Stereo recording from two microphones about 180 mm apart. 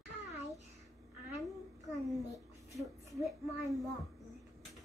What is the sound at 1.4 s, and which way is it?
Speech, centre (ahead or behind).